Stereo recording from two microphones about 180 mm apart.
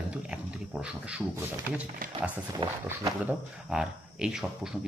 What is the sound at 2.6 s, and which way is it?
Speech, 25° right (ahead or behind).